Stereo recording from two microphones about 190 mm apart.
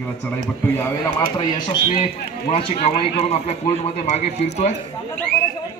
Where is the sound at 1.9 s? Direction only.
30° left (ahead or behind).